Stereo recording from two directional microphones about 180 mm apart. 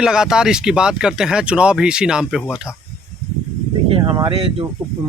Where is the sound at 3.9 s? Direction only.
25° right (ahead or behind).